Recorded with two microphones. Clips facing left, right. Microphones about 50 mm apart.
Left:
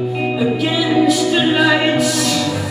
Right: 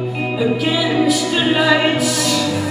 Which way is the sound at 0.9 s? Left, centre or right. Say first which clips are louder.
Left 5 dB; centre.